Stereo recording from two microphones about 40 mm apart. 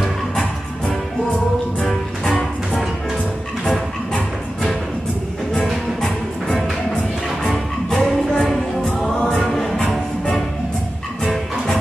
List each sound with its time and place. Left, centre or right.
1.8 s music: centre
5.5 s music: centre
9.0 s choir: left
9.5 s music: centre